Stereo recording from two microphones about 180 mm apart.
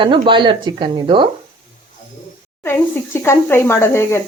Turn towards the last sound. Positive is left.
turn(degrees=15)  # may be behind; listen again after turning